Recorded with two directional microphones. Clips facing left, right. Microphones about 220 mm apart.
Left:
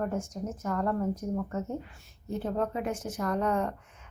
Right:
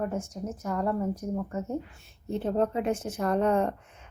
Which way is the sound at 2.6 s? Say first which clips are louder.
Right 4 dB; 25° right (ahead or behind).